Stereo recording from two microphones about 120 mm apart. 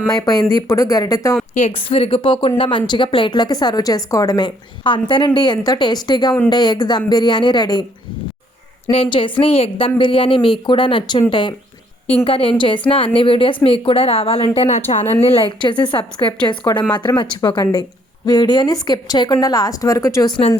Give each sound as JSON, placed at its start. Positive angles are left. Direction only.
{"t": 0.2, "sound": "a woman's voice", "side_deg": 35}
{"t": 1.8, "sound": "a woman's voice", "side_deg": 50}
{"t": 8.9, "sound": "a woman's voice", "side_deg": 50}
{"t": 15.4, "sound": "a woman's voice", "side_deg": 40}